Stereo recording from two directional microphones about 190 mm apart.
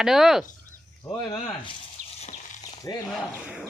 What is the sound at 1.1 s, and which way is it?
Speech, 20° left (ahead or behind).